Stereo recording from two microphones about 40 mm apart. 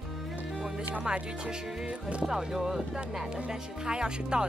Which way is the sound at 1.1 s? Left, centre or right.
Right.